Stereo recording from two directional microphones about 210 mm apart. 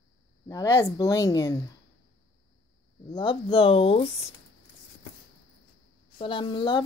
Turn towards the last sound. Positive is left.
turn(degrees=20)  # may be behind; listen again after turning